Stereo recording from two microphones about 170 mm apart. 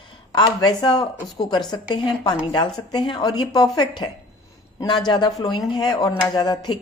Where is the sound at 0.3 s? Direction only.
25° left (ahead or behind).